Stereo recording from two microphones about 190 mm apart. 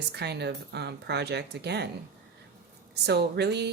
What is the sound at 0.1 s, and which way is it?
Speech, 60° right (ahead or behind).